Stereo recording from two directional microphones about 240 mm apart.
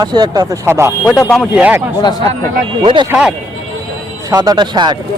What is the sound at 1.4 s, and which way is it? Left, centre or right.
Speech, centre.